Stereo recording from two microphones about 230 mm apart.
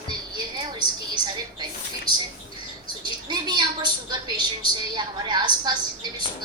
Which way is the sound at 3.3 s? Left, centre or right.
Centre.